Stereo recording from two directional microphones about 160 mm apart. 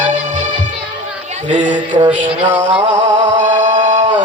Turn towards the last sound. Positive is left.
turn(degrees=-50)  # may be behind; listen again after turning